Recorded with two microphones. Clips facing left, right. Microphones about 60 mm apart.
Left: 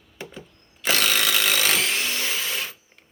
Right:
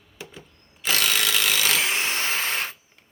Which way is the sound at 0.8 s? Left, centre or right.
Left.